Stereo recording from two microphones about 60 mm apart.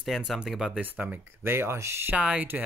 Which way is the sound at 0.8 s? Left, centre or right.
Right.